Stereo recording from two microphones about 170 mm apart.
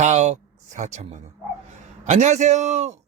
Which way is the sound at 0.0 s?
40° right (ahead or behind).